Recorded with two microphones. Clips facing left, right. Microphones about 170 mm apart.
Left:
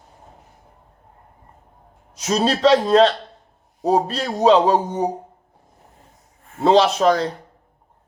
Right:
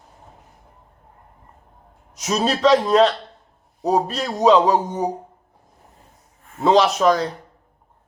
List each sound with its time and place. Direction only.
2.1 s speech: 30° left (ahead or behind)
6.6 s speech: 30° left (ahead or behind)